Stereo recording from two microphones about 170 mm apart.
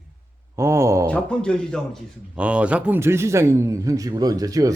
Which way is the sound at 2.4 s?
5° right (ahead or behind).